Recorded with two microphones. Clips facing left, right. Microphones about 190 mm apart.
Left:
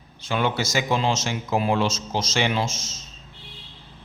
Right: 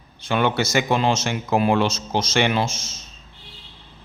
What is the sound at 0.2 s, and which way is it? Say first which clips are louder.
Speech: right 3 dB; 60° right (ahead or behind).